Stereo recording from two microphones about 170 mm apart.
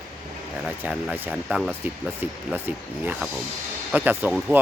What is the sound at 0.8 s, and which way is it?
Speech, 10° right (ahead or behind).